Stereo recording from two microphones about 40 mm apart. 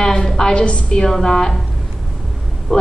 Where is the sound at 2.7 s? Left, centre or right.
Centre.